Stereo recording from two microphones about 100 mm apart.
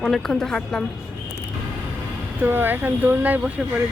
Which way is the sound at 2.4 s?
20° right (ahead or behind).